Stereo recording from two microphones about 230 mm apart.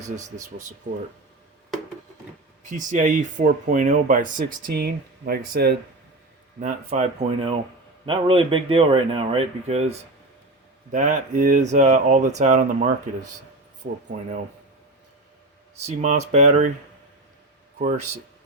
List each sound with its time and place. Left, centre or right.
0.0 s speech: right
2.6 s speech: right
6.6 s speech: right
10.9 s speech: right
13.8 s speech: right
15.9 s speech: right
17.7 s speech: right